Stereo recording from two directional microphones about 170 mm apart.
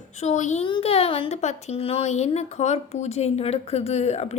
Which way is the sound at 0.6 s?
30° left (ahead or behind).